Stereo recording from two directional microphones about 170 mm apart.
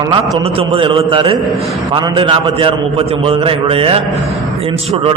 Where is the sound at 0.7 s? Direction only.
30° right (ahead or behind).